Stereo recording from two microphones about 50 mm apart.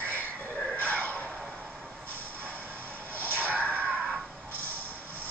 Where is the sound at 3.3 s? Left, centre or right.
Left.